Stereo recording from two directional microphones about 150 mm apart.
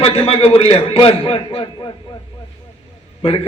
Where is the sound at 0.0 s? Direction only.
40° left (ahead or behind).